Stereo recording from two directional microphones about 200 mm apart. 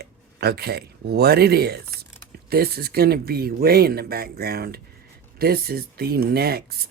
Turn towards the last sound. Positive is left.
turn(degrees=-50)  # may be behind; listen again after turning